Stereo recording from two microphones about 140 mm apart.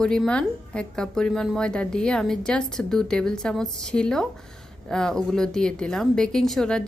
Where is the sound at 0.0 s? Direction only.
5° left (ahead or behind).